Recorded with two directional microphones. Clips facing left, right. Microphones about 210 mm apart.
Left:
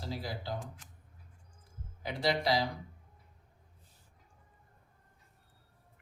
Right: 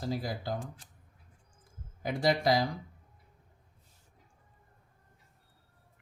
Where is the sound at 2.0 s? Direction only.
45° right (ahead or behind).